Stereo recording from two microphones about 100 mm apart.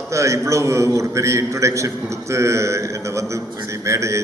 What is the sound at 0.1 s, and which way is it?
A man's voice, 30° right (ahead or behind).